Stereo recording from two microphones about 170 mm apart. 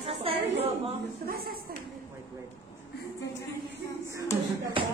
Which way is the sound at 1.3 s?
60° right (ahead or behind).